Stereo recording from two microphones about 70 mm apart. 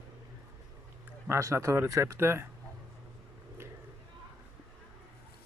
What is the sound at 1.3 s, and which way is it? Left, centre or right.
Speech, right.